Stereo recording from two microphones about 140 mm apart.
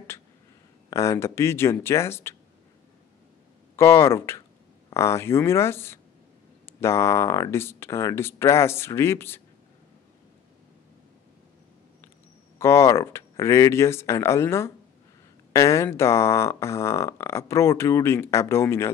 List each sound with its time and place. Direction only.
0.8 s speech: 25° left (ahead or behind)
3.7 s speech: 20° left (ahead or behind)
12.5 s speech: 20° left (ahead or behind)